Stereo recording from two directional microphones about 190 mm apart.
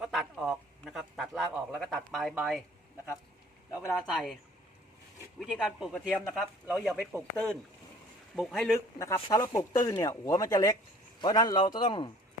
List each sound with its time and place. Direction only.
0.0 s a man's voice: centre (ahead or behind)
4.0 s speech: centre (ahead or behind)
5.4 s speech: centre (ahead or behind)
9.0 s speech: 15° left (ahead or behind)